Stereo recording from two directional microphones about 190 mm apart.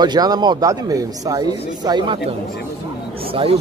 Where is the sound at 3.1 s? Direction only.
30° right (ahead or behind).